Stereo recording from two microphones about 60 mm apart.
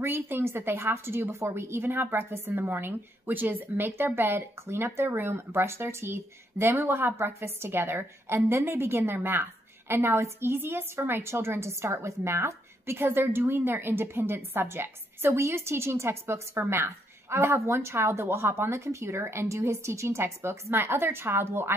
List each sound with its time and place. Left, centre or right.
0.0 s speech: right
20.7 s speech: right